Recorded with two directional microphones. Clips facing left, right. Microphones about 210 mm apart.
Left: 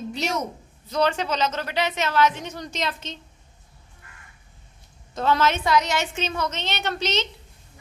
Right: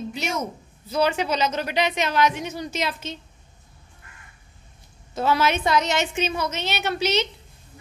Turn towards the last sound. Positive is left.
turn(degrees=-10)  # may be behind; listen again after turning